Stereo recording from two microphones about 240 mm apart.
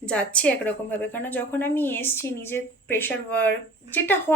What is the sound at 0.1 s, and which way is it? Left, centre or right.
A woman's voice, centre.